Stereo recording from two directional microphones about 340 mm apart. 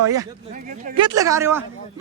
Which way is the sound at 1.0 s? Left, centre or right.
Centre.